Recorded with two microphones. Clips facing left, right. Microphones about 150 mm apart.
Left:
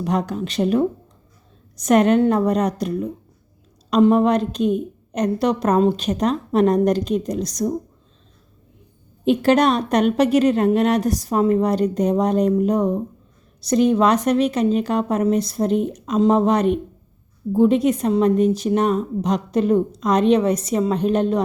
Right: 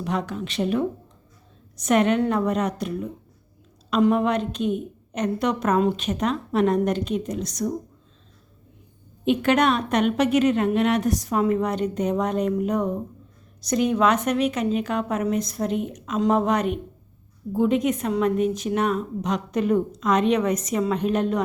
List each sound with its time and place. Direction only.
0.0 s a woman's voice: 40° left (ahead or behind)
4.1 s a woman's voice: 35° left (ahead or behind)
9.2 s a woman's voice: 35° left (ahead or behind)